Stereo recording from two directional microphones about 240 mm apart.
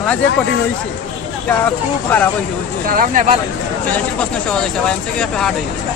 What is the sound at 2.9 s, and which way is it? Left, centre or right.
Speech, right.